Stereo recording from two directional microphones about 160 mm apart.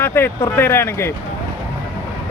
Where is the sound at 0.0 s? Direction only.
15° left (ahead or behind).